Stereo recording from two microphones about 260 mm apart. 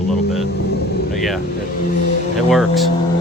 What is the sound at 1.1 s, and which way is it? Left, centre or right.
Speech, centre.